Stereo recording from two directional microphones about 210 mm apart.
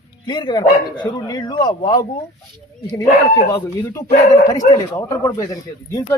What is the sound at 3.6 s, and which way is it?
Speech, 10° left (ahead or behind).